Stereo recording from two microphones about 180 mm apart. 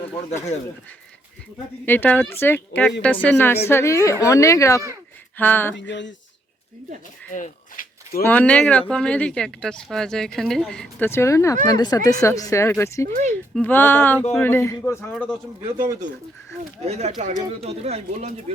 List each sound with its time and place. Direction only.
1.8 s speech: 10° left (ahead or behind)
5.7 s a sound: 80° left
7.3 s a sound: 45° left (ahead or behind)
8.2 s speech: 10° left (ahead or behind)
15.1 s speech: 5° left (ahead or behind)
16.8 s speech: 35° right (ahead or behind)